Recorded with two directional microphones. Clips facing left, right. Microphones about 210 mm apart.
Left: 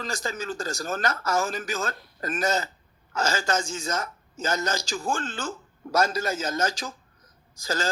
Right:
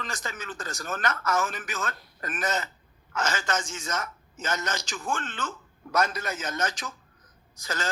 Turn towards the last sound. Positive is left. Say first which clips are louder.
# left 4 dB
turn(degrees=30)  # may be behind; listen again after turning